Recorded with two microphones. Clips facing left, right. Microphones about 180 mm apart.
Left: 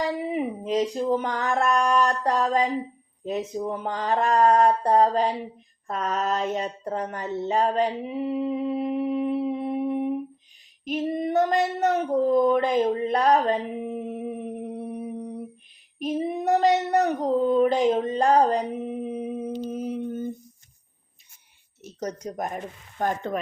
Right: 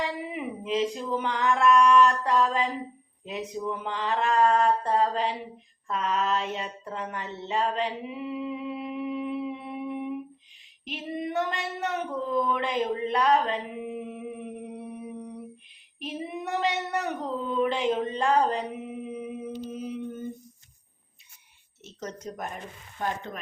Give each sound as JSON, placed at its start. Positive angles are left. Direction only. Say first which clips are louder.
{"t": 0.0, "sound": "a sound", "louder": "left 6 dB", "side_deg": 40}
{"t": 3.2, "sound": "child singing", "louder": "left 4 dB", "side_deg": 40}
{"t": 5.9, "sound": "speech", "louder": "left 1 dB", "side_deg": 45}
{"t": 10.8, "sound": "female singing", "louder": "left 7 dB", "side_deg": 40}
{"t": 16.0, "sound": "child singing", "louder": "left 8 dB", "side_deg": 40}
{"t": 22.2, "sound": "speech", "louder": "left 5 dB", "side_deg": 15}
{"t": 23.0, "sound": "stir", "louder": "left 5 dB", "side_deg": 45}